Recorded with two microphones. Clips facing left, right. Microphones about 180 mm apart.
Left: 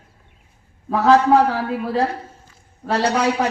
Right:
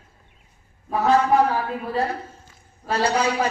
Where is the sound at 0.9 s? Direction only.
90° left.